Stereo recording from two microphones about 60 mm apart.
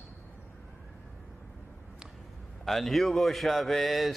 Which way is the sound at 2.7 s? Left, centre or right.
Centre.